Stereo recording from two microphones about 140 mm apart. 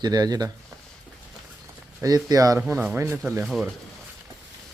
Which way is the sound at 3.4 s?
Centre (ahead or behind).